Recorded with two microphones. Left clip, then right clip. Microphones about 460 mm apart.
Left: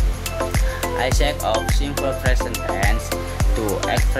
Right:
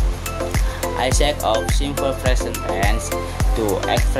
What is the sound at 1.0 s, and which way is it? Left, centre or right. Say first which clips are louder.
Music: right 3 dB; left.